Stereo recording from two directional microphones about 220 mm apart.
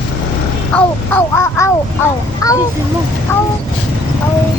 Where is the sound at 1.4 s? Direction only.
10° left (ahead or behind).